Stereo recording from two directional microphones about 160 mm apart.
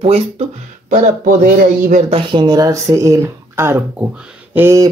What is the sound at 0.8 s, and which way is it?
Speech, 55° right (ahead or behind).